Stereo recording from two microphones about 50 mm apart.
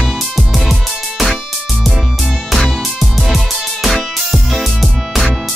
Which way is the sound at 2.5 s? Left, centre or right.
Centre.